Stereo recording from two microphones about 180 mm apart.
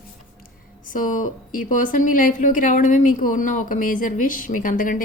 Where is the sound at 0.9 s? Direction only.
45° left (ahead or behind).